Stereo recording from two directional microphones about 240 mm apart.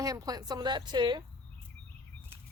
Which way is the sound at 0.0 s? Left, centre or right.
Centre.